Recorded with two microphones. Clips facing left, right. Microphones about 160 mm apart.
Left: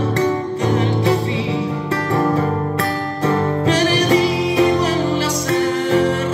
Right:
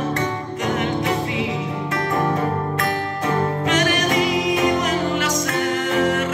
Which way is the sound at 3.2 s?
35° left (ahead or behind).